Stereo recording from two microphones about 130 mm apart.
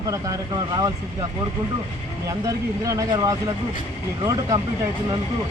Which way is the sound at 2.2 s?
25° right (ahead or behind).